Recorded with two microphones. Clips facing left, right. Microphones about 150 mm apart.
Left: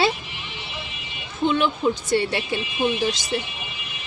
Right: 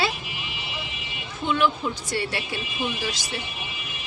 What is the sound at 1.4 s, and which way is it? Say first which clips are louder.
A woman's voice: left 3 dB; 25° left (ahead or behind).